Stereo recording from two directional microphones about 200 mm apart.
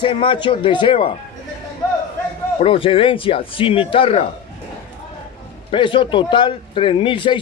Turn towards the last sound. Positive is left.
turn(degrees=25)  # may be behind; listen again after turning